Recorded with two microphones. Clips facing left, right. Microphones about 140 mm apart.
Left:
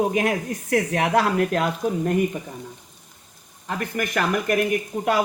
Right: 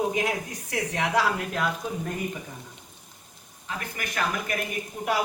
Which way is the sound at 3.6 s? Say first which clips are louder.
Left 8 dB; 60° left (ahead or behind).